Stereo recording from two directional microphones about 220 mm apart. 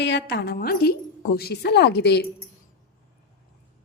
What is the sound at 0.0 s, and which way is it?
A woman's voice, 50° left (ahead or behind).